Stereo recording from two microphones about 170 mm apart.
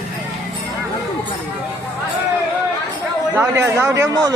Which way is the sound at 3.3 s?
15° right (ahead or behind).